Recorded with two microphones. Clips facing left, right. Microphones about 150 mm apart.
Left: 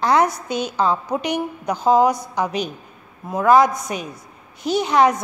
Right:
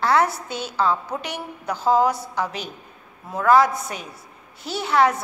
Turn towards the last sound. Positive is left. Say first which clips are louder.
# left 3 dB
turn(degrees=20)  # may be behind; listen again after turning